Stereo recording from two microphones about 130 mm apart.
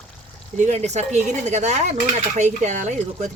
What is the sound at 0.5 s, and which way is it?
Speech, 60° right (ahead or behind).